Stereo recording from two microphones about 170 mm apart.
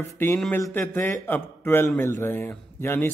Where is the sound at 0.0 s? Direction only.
15° left (ahead or behind).